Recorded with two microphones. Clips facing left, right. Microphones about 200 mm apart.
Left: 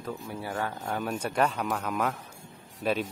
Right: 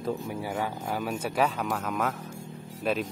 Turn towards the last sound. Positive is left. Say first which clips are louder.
# even
turn(degrees=0)  # may be behind; listen again after turning